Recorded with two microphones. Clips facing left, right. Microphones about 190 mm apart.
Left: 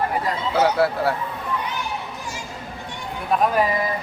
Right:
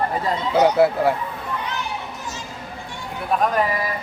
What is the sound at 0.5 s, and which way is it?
Speech, 15° right (ahead or behind).